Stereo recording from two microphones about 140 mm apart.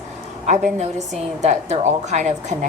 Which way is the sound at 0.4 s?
60° right (ahead or behind).